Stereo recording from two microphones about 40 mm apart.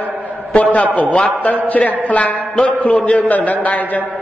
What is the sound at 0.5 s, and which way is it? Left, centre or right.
A man's voice, left.